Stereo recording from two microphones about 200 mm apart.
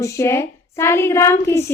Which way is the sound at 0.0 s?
15° left (ahead or behind).